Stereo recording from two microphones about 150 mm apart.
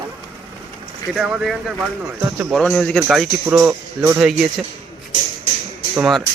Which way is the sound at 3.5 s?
15° right (ahead or behind).